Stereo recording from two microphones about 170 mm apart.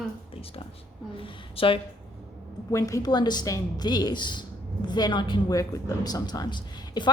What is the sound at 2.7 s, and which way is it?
A woman's voice, 20° left (ahead or behind).